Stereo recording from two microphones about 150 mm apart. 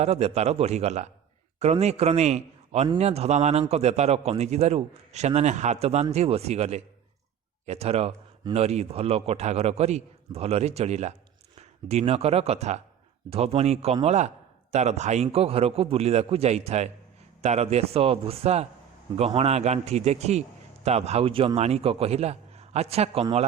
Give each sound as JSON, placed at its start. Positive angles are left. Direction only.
{"t": 0.0, "sound": "a man's voice", "side_deg": -45}